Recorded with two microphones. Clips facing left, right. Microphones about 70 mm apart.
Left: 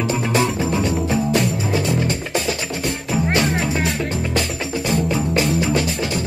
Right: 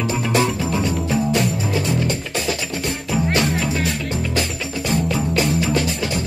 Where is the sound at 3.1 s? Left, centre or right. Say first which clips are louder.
Even; centre.